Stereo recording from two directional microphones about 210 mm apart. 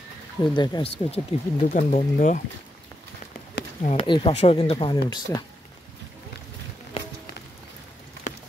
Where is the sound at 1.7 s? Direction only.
40° left (ahead or behind).